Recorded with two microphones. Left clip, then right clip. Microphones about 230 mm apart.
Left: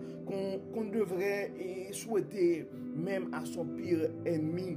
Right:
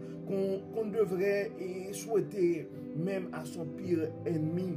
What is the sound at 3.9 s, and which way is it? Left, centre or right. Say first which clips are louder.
Speech: even; left.